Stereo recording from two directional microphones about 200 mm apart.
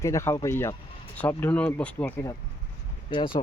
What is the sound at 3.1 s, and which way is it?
Speech, 25° left (ahead or behind).